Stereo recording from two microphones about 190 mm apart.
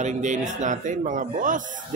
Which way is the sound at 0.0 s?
40° right (ahead or behind).